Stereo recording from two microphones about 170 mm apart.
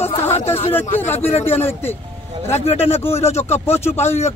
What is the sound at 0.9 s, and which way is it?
Speech, 10° left (ahead or behind).